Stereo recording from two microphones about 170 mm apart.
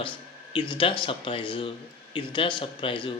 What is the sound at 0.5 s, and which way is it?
Speech, 30° left (ahead or behind).